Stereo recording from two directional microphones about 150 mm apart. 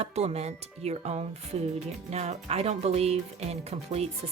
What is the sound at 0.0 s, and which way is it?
Music, 45° right (ahead or behind).